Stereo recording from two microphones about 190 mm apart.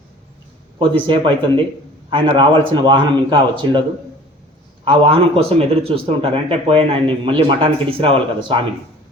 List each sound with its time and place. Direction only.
0.8 s a man's voice: 25° right (ahead or behind)
4.9 s a man's voice: 30° right (ahead or behind)